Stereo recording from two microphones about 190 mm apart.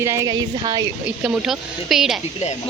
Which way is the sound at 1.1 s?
5° right (ahead or behind).